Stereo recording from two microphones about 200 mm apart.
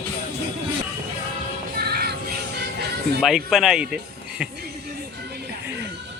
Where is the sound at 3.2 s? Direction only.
Centre (ahead or behind).